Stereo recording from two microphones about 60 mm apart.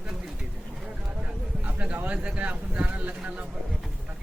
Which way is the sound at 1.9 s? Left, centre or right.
Right.